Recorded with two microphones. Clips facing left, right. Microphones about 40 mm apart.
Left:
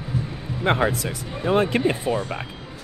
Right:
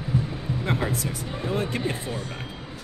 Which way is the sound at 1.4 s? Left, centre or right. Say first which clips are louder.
Left 8 dB; left.